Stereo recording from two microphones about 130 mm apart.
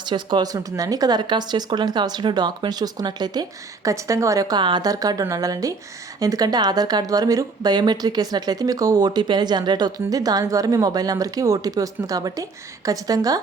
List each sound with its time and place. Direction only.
0.0 s speech: 35° right (ahead or behind)